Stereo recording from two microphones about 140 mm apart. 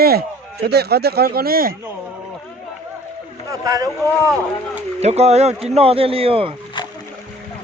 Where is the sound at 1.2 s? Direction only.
90° right.